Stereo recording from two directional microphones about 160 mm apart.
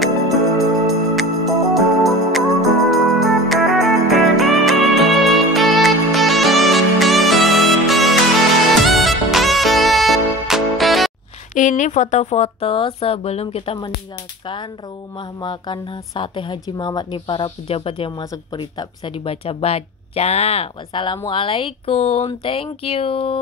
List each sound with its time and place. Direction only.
0.0 s music: centre (ahead or behind)
11.5 s speech: 50° left (ahead or behind); by 13.9 s 35° left (ahead or behind)
15.1 s speech: 30° left (ahead or behind)